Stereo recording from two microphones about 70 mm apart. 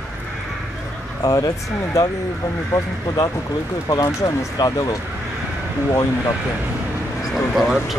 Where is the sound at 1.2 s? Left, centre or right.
Left.